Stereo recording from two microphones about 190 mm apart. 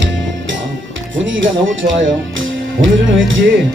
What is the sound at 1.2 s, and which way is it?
Music, 90° right.